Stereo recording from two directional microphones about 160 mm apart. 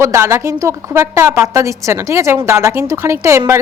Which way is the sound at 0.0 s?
15° right (ahead or behind).